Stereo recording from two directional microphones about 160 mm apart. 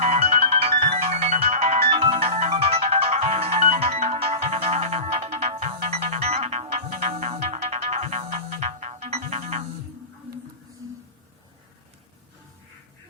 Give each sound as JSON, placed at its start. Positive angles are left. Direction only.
{"t": 0.0, "sound": "ringtone", "side_deg": -40}